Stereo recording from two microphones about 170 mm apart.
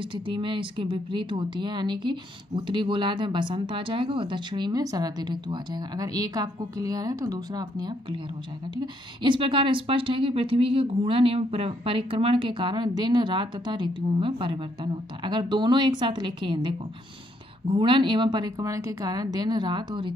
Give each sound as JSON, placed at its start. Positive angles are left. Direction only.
{"t": 0.0, "sound": "speech", "side_deg": -30}